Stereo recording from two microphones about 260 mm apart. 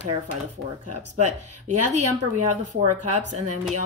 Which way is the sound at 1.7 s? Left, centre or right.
Right.